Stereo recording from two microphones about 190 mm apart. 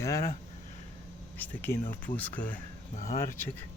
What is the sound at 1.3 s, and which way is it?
Speech, 10° left (ahead or behind).